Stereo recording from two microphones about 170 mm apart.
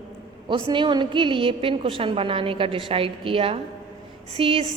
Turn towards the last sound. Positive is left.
turn(degrees=-35)  # may be behind; listen again after turning